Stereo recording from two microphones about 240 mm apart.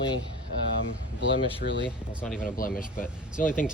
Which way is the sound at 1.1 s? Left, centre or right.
Left.